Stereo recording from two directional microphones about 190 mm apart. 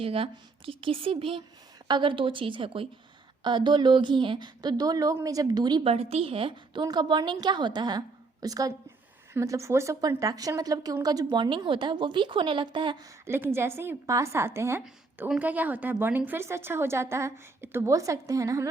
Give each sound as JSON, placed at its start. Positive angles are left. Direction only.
{"t": 0.0, "sound": "speech", "side_deg": -30}
{"t": 13.2, "sound": "a woman's voice", "side_deg": -10}